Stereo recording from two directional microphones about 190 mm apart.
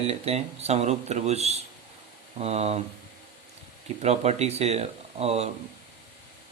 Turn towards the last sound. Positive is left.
turn(degrees=-35)  # may be behind; listen again after turning